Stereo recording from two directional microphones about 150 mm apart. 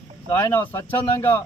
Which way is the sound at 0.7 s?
15° left (ahead or behind).